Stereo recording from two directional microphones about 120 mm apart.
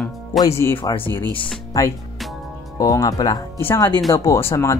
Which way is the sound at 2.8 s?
30° left (ahead or behind).